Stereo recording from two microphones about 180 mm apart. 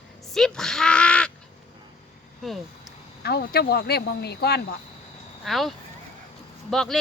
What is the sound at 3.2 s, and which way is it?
Speech, 60° left (ahead or behind).